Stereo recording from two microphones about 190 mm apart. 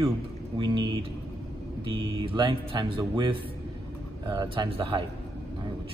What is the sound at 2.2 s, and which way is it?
A man's voice, 25° right (ahead or behind).